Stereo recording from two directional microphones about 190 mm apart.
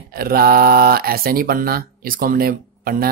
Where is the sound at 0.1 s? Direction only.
50° right (ahead or behind).